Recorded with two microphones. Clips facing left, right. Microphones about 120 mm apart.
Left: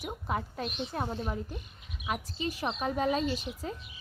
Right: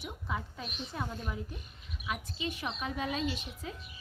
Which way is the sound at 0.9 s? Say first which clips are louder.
Left 3 dB; 45° left (ahead or behind).